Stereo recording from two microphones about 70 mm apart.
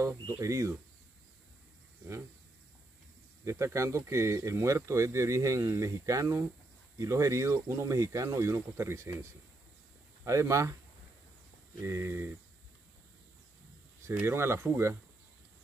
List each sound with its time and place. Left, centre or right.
0.0 s speech: right
3.4 s speech: right
11.8 s speech: right
14.2 s speech: right